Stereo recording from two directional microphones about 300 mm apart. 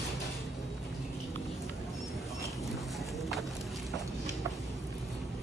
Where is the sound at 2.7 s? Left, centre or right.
Centre.